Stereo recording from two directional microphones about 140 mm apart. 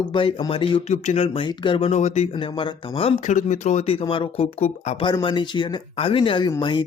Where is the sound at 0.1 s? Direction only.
40° left (ahead or behind).